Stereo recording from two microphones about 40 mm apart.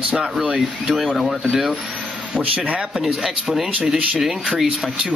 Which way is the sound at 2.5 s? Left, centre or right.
Right.